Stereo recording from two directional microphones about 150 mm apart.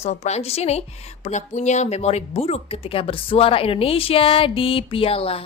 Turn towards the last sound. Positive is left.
turn(degrees=40)  # may be behind; listen again after turning